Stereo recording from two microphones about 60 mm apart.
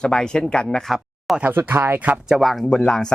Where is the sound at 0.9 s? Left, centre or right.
Centre.